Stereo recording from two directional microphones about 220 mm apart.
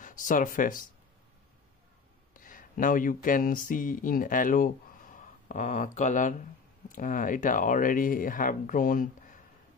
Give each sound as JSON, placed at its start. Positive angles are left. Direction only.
{"t": 0.0, "sound": "speech", "side_deg": 35}
{"t": 2.3, "sound": "speech", "side_deg": 40}